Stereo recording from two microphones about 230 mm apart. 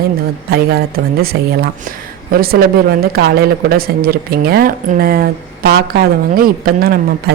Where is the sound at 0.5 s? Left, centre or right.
Right.